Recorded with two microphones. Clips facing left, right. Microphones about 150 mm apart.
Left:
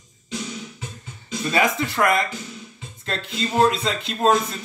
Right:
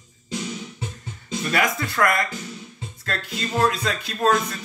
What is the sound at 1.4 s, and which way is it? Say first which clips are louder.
Speech: left 3 dB; 25° left (ahead or behind).